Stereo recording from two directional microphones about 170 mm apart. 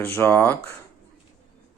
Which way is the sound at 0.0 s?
10° left (ahead or behind).